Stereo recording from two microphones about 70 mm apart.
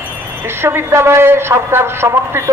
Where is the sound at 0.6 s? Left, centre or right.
Right.